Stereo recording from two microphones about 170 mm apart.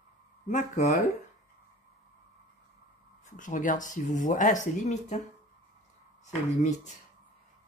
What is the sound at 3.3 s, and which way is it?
Speech, 50° left (ahead or behind).